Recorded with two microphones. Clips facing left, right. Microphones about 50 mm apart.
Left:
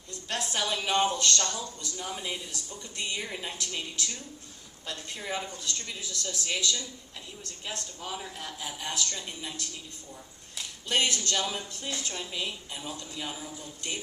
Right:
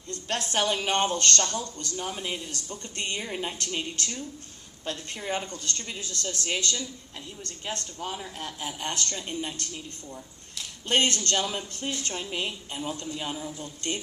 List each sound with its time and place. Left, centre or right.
0.1 s a woman's voice: right
3.2 s a woman's voice: right
3.6 s a woman's voice: right
10.8 s a woman's voice: right
13.6 s speech: right